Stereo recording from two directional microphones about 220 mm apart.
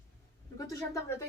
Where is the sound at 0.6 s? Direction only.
15° left (ahead or behind).